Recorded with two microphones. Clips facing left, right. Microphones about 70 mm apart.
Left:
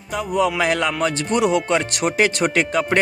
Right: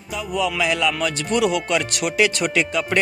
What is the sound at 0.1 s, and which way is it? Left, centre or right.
Music, left.